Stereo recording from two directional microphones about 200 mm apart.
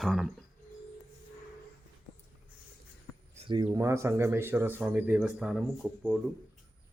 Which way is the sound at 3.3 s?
25° right (ahead or behind).